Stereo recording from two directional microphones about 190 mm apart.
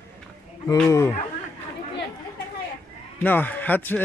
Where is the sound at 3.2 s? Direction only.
10° left (ahead or behind).